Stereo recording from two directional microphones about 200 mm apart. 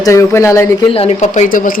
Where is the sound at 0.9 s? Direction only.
30° left (ahead or behind).